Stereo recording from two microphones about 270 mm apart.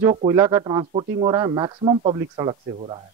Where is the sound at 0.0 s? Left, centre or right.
Centre.